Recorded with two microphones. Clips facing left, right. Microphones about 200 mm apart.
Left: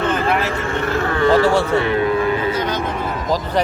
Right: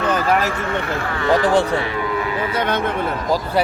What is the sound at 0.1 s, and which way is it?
Vehicle, 40° right (ahead or behind).